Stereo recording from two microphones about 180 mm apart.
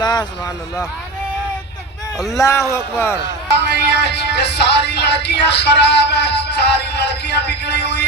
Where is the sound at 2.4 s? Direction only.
15° left (ahead or behind).